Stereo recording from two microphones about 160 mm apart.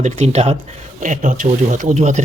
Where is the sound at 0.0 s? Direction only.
45° right (ahead or behind).